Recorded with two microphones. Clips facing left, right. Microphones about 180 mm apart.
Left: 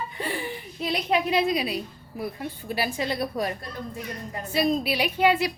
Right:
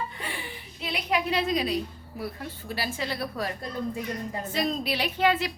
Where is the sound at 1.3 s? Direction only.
10° left (ahead or behind).